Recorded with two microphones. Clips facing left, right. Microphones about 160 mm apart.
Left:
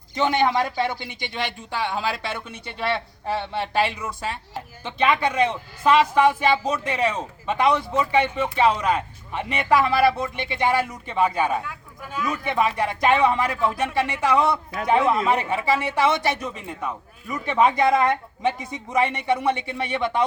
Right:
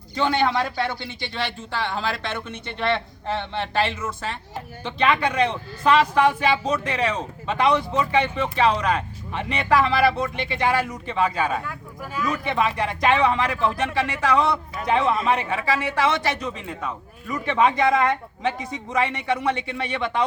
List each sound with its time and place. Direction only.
0.1 s a man's voice: 15° left (ahead or behind)